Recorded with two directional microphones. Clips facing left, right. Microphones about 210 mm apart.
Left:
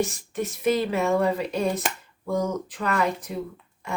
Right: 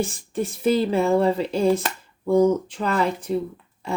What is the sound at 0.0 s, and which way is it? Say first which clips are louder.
Speech: right 1 dB; 30° right (ahead or behind).